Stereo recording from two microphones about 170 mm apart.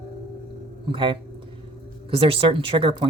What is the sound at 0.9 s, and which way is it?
Speech, 30° right (ahead or behind).